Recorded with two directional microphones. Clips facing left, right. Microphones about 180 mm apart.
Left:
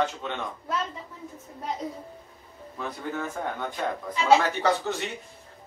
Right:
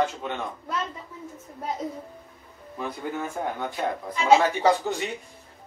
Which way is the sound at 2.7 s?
10° right (ahead or behind).